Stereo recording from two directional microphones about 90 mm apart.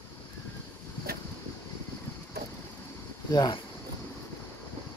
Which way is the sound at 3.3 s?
50° left (ahead or behind).